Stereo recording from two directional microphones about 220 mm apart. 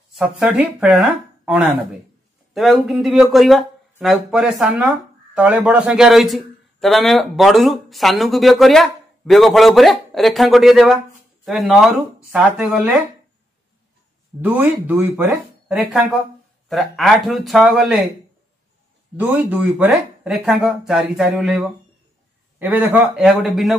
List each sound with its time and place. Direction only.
0.1 s speech: 5° right (ahead or behind)
14.4 s speech: 10° right (ahead or behind)
19.1 s speech: 5° right (ahead or behind)